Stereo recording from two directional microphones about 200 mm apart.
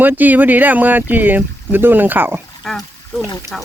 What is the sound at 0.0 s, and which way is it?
Speech, 10° right (ahead or behind).